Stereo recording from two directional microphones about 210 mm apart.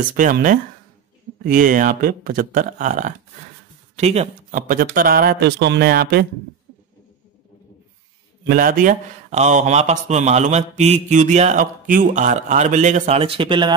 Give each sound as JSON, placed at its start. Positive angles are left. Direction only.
{"t": 0.1, "sound": "speech", "side_deg": -40}
{"t": 8.5, "sound": "speech", "side_deg": -40}